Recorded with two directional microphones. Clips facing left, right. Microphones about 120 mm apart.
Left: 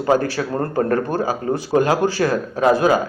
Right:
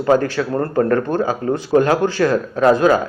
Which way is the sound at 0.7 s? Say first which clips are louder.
Right 3 dB; 35° left (ahead or behind).